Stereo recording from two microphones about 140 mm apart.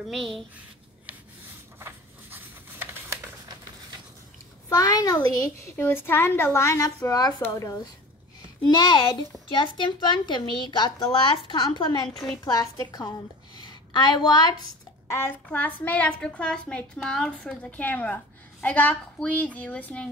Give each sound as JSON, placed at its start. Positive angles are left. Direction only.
{"t": 0.1, "sound": "speech", "side_deg": 0}
{"t": 1.8, "sound": "a sound", "side_deg": -15}
{"t": 4.6, "sound": "a woman's voice", "side_deg": 25}
{"t": 5.4, "sound": "a woman's voice", "side_deg": 15}
{"t": 12.1, "sound": "speech", "side_deg": 0}
{"t": 12.4, "sound": "a woman's voice", "side_deg": 25}
{"t": 13.6, "sound": "a sound", "side_deg": 30}
{"t": 15.0, "sound": "a child's voice", "side_deg": 20}